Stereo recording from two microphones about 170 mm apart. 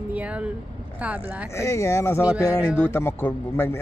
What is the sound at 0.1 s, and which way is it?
Speech, 5° right (ahead or behind).